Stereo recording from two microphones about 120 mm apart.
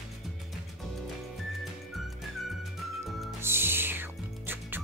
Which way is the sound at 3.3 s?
20° right (ahead or behind).